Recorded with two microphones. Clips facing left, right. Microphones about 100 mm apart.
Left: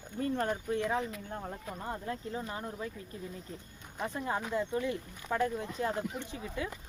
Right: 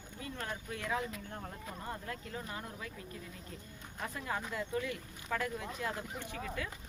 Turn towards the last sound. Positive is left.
turn(degrees=20)  # may be behind; listen again after turning